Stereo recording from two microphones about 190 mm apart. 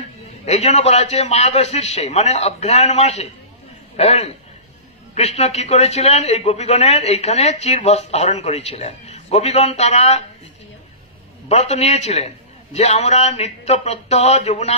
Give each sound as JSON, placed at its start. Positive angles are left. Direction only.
{"t": 0.5, "sound": "a man's voice", "side_deg": 35}
{"t": 11.4, "sound": "a man's voice", "side_deg": 35}